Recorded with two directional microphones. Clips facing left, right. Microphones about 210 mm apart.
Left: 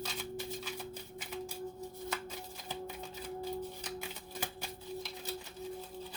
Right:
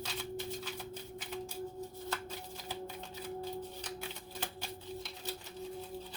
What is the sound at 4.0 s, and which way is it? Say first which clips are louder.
Typewriter: left 1 dB; 10° left (ahead or behind).